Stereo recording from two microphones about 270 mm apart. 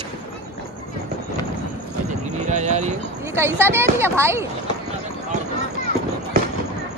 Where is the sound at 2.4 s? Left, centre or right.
Right.